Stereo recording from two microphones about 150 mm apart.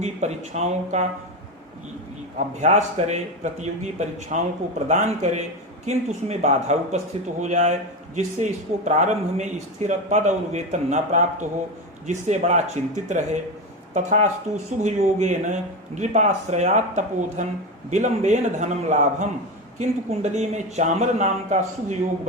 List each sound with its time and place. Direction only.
0.0 s a man's voice: 50° right (ahead or behind)
2.6 s a man's voice: 50° right (ahead or behind)